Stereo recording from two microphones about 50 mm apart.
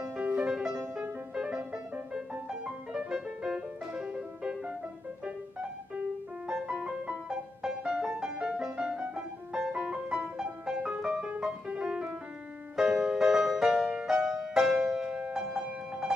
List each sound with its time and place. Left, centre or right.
0.0 s music: right
6.4 s music: centre